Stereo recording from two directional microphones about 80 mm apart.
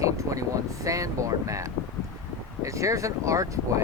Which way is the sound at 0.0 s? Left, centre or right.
Right.